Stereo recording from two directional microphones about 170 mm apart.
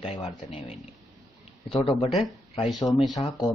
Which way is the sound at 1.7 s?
35° left (ahead or behind).